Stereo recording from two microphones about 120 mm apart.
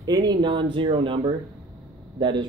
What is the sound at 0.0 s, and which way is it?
Speech, 35° right (ahead or behind).